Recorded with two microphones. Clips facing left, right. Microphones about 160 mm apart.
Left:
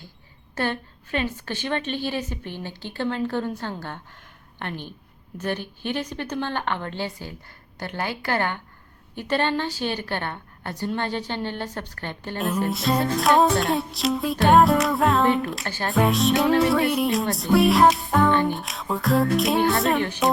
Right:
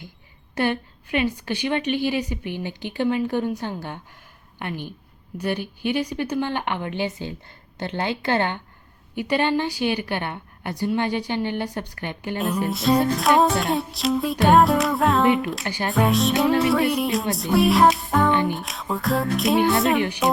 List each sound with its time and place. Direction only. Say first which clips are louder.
0.5 s a woman's voice: right 3 dB; 15° right (ahead or behind)
5.4 s a woman's voice: right 3 dB; 10° right (ahead or behind)
9.1 s a woman's voice: right 2 dB; 10° right (ahead or behind)
12.6 s music: right 5 dB; centre (ahead or behind)
15.6 s a woman's voice: right 2 dB; 15° right (ahead or behind)
15.9 s music: even; centre (ahead or behind)
20.0 s a woman's voice: right 2 dB; 15° right (ahead or behind)